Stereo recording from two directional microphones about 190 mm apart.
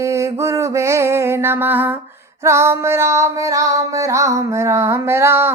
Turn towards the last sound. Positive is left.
turn(degrees=-10)  # may be behind; listen again after turning